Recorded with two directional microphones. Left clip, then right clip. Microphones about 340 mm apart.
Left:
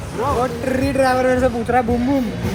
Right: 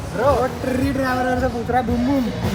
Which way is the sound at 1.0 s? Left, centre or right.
Left.